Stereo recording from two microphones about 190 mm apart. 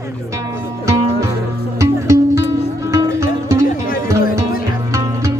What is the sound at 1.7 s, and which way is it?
Music, 15° right (ahead or behind).